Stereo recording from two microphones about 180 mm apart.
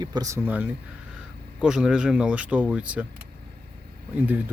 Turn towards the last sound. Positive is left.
turn(degrees=-10)  # may be behind; listen again after turning